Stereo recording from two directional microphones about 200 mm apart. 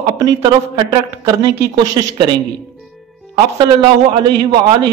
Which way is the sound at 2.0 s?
20° right (ahead or behind).